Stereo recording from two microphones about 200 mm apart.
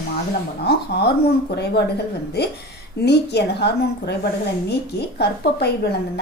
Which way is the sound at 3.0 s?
55° left (ahead or behind).